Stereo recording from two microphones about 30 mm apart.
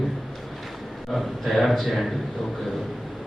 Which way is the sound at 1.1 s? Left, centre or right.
Centre.